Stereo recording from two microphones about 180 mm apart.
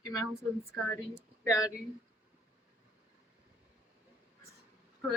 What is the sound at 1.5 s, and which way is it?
Speech, 20° left (ahead or behind).